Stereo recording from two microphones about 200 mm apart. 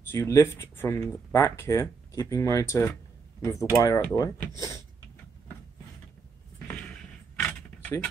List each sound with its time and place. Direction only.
0.1 s speech: 15° left (ahead or behind)
7.3 s keys jangling: 10° left (ahead or behind)